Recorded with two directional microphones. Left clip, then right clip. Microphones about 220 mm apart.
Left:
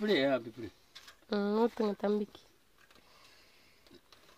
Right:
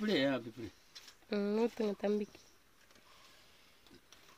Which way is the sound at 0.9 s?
5° left (ahead or behind).